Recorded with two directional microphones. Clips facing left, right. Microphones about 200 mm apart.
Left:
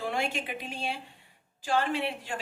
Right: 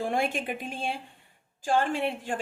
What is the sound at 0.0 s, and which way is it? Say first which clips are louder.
A woman's voice: right 4 dB; 50° right (ahead or behind).